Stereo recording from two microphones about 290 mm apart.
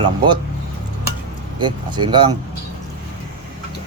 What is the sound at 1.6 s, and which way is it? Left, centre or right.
Speech, centre.